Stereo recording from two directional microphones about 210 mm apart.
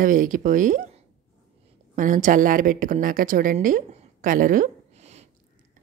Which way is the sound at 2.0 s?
40° right (ahead or behind).